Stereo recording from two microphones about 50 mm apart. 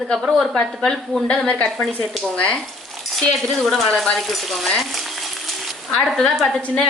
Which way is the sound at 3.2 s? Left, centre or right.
Centre.